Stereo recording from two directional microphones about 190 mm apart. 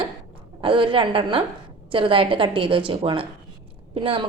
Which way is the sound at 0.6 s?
25° right (ahead or behind).